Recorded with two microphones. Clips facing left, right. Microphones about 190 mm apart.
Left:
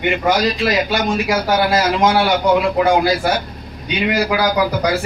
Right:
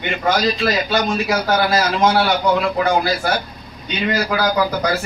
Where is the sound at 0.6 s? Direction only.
10° left (ahead or behind).